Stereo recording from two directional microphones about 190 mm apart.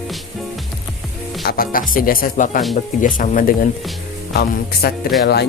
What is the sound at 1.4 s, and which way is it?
Speech, 50° left (ahead or behind).